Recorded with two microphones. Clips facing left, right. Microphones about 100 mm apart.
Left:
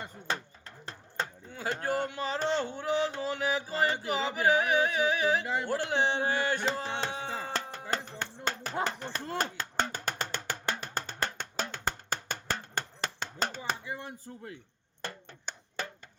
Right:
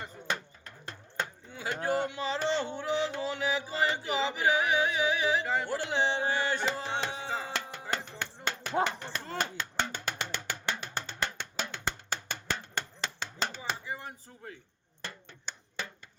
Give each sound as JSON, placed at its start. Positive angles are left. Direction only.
{"t": 0.3, "sound": "chopping", "side_deg": 30}
{"t": 1.5, "sound": "chop", "side_deg": 45}
{"t": 2.0, "sound": "music", "side_deg": 45}
{"t": 6.7, "sound": "tabla", "side_deg": 50}
{"t": 7.5, "sound": "music", "side_deg": 40}
{"t": 8.8, "sound": "a sound", "side_deg": 40}
{"t": 15.0, "sound": "a sound", "side_deg": 45}